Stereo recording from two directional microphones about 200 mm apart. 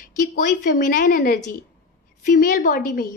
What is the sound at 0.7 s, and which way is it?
A woman's voice, 40° left (ahead or behind).